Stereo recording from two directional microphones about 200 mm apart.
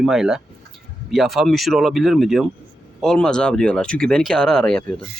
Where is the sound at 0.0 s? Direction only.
Centre (ahead or behind).